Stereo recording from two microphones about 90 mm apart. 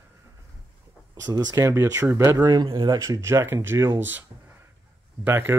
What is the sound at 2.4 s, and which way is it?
Speech, 50° right (ahead or behind).